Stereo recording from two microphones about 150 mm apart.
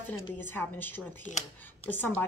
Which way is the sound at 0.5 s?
15° left (ahead or behind).